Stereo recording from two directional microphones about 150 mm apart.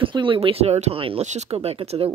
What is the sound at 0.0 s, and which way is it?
Speech, 35° right (ahead or behind).